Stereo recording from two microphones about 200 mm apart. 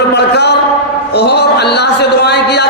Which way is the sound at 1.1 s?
55° left (ahead or behind).